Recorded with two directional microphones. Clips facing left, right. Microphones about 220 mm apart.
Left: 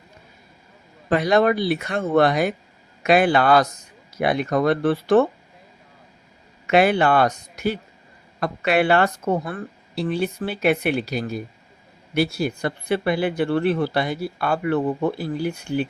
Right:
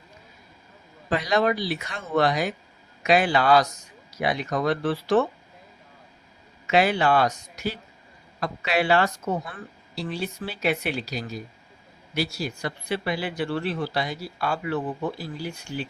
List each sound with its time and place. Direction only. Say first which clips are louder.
1.1 s speech: left 5 dB; 55° left (ahead or behind)
6.7 s speech: left 4 dB; 55° left (ahead or behind)